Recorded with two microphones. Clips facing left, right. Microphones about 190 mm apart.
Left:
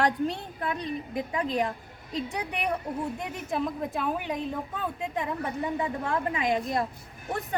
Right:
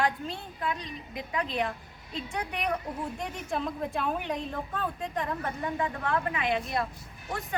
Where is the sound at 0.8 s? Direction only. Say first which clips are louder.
Left 8 dB; 55° left (ahead or behind).